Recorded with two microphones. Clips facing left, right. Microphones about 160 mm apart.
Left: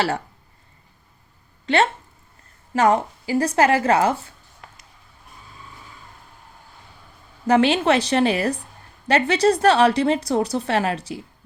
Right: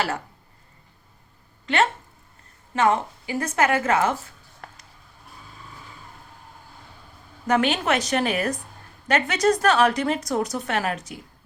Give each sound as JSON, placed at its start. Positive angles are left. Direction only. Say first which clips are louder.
{"t": 1.6, "sound": "a woman's voice", "louder": "left 3 dB", "side_deg": 35}
{"t": 7.4, "sound": "a woman's voice", "louder": "left 5 dB", "side_deg": 30}